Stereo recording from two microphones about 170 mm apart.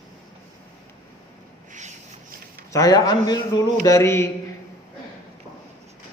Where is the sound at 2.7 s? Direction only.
20° left (ahead or behind).